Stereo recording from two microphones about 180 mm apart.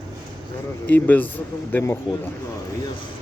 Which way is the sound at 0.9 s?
10° left (ahead or behind).